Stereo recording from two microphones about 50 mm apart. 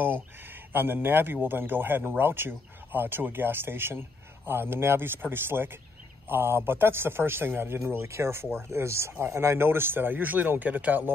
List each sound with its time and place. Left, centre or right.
0.0 s speech: right